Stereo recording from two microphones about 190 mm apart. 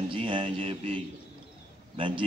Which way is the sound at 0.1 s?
30° right (ahead or behind).